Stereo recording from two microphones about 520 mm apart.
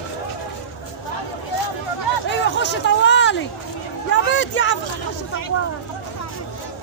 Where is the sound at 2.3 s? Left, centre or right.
Centre.